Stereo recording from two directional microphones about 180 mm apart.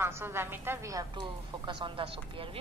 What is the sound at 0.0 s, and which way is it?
A woman's voice, 15° right (ahead or behind).